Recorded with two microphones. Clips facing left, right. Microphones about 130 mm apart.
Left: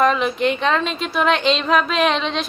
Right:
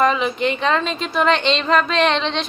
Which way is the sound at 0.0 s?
Centre (ahead or behind).